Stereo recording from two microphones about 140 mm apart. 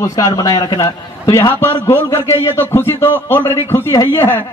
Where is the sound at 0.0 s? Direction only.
25° left (ahead or behind).